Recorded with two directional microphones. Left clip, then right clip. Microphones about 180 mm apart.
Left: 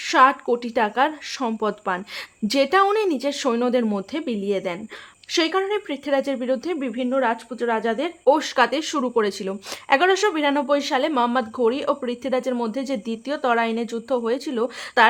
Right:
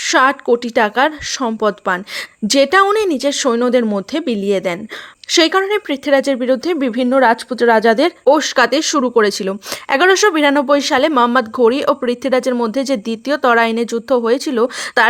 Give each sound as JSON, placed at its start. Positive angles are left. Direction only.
{"t": 0.0, "sound": "a woman's voice", "side_deg": -25}
{"t": 6.8, "sound": "speech", "side_deg": -60}
{"t": 8.2, "sound": "a woman's voice", "side_deg": -25}